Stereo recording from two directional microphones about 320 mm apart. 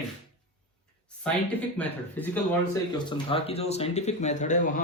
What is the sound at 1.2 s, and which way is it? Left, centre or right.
Speech, centre.